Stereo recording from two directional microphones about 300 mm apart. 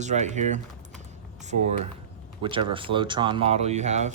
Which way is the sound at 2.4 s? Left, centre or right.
Centre.